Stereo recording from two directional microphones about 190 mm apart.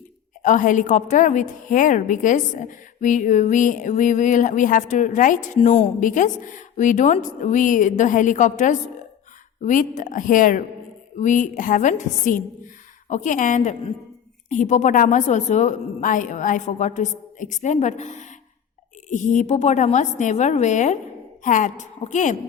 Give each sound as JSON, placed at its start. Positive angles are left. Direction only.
{"t": 0.4, "sound": "a woman's voice", "side_deg": 45}
{"t": 5.5, "sound": "a woman's voice", "side_deg": 30}